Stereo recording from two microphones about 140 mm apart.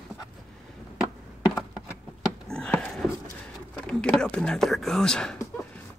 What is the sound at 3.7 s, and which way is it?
Whispering, 5° left (ahead or behind).